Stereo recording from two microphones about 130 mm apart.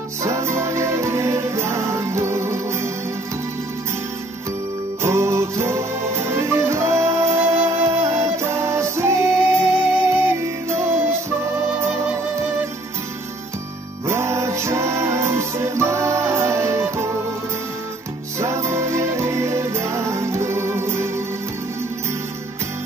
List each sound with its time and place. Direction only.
0.2 s music: 20° right (ahead or behind)
5.0 s music: 20° right (ahead or behind)
14.0 s music: 20° right (ahead or behind)
18.4 s music: 20° right (ahead or behind)